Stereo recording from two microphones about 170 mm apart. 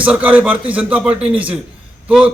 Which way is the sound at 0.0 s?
10° right (ahead or behind).